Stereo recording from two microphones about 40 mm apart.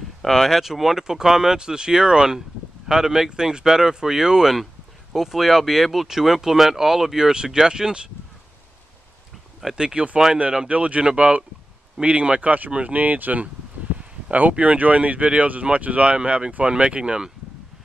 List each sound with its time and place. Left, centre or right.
0.2 s speech: centre; by 8.1 s right
9.8 s speech: right
10.7 s speech: right
14.6 s speech: right